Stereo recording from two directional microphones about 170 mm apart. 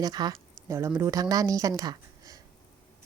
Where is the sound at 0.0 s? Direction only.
25° right (ahead or behind).